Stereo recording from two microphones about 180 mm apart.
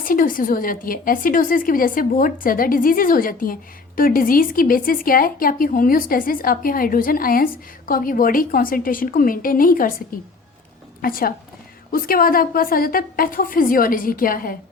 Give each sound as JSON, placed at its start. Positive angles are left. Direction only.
{"t": 0.0, "sound": "speech", "side_deg": 50}
{"t": 11.0, "sound": "speech", "side_deg": 55}